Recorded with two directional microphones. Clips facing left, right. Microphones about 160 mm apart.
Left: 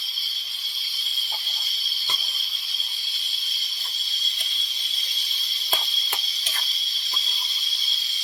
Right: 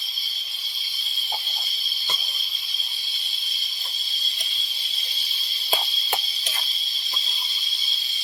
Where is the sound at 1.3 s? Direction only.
55° right (ahead or behind).